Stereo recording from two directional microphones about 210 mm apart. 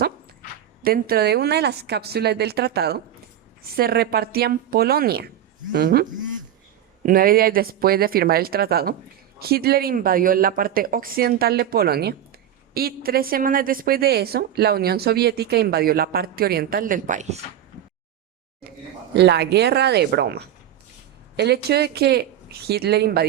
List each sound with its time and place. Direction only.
0.8 s a woman's voice: 45° right (ahead or behind)
19.1 s a woman's voice: 55° right (ahead or behind)